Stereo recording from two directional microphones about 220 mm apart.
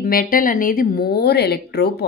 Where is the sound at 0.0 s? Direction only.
40° left (ahead or behind).